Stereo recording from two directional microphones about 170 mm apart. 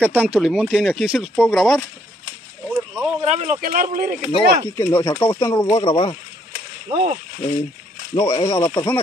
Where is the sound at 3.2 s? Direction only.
40° right (ahead or behind).